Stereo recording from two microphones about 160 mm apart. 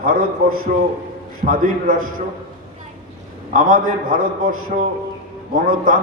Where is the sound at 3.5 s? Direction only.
60° right (ahead or behind).